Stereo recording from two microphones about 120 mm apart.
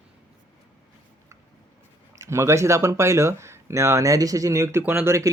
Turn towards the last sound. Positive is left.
turn(degrees=-15)  # may be behind; listen again after turning